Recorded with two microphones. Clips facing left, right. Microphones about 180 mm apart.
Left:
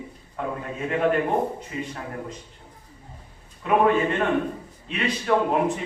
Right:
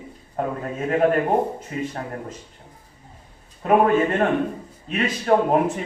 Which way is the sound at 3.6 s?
45° right (ahead or behind).